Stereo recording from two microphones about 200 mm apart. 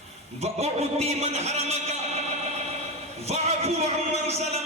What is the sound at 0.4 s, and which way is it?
A man's voice, 30° right (ahead or behind).